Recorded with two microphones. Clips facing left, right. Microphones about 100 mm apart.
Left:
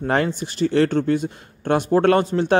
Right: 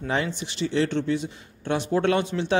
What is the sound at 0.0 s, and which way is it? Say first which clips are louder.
Speech: left 6 dB; 50° left (ahead or behind).